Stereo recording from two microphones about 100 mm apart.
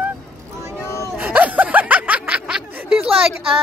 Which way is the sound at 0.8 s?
30° left (ahead or behind).